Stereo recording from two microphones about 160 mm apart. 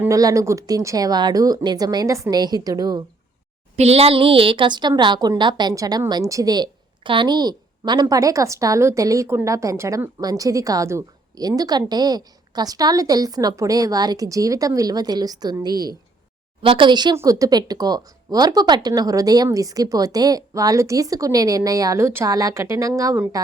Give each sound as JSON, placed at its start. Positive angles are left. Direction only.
{"t": 0.0, "sound": "a woman's voice", "side_deg": -20}
{"t": 3.8, "sound": "a woman's voice", "side_deg": -40}